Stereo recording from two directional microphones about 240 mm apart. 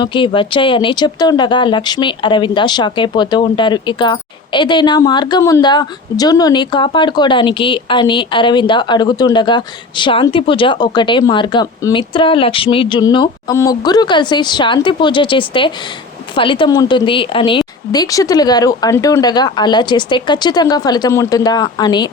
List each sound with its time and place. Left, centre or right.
0.0 s speech: left